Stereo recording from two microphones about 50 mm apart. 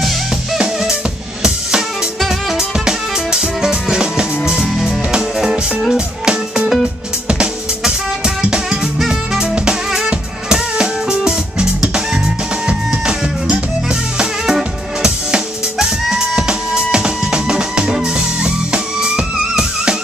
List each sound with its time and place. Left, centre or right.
2.1 s music: centre
14.1 s drum kit: centre